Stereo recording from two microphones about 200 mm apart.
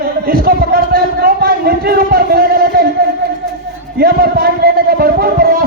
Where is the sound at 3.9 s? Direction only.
50° right (ahead or behind).